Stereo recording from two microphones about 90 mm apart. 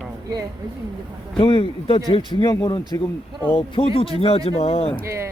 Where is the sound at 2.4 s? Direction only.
45° left (ahead or behind).